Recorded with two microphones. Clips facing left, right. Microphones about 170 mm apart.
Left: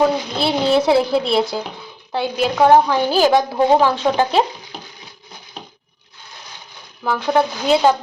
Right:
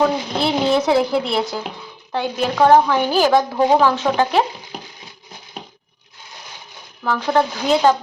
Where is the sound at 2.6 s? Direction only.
10° left (ahead or behind).